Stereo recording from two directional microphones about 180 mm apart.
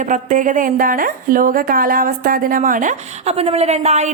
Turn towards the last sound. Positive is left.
turn(degrees=-40)  # may be behind; listen again after turning